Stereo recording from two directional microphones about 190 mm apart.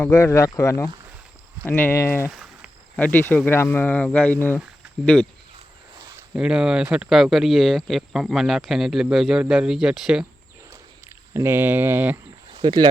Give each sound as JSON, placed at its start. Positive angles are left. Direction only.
{"t": 0.0, "sound": "speech", "side_deg": 10}
{"t": 2.3, "sound": "a sound", "side_deg": -5}
{"t": 3.0, "sound": "speech", "side_deg": 10}
{"t": 6.3, "sound": "speech", "side_deg": -5}
{"t": 11.3, "sound": "speech", "side_deg": -10}
{"t": 12.5, "sound": "speech", "side_deg": -25}